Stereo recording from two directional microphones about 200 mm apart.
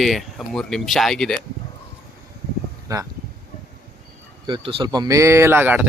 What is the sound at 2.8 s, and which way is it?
Speech, 15° right (ahead or behind).